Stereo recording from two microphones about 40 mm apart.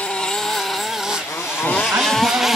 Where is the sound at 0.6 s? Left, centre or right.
Centre.